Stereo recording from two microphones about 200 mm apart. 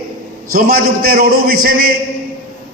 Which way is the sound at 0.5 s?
45° right (ahead or behind).